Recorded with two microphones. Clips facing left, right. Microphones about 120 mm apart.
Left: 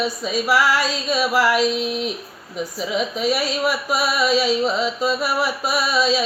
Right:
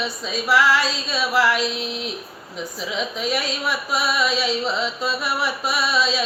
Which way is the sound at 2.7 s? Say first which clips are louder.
Left 4 dB; 5° left (ahead or behind).